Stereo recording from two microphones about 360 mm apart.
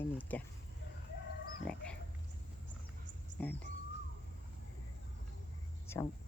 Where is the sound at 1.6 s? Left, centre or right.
Centre.